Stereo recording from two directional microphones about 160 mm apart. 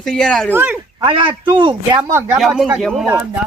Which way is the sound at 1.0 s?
30° right (ahead or behind).